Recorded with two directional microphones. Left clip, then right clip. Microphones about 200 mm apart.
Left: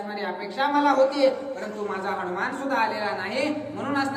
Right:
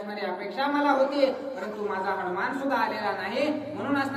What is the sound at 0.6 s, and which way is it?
Speech, 15° left (ahead or behind).